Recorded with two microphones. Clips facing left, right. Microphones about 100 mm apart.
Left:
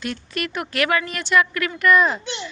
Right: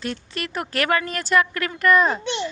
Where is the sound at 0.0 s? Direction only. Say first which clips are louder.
Left 2 dB; 30° right (ahead or behind).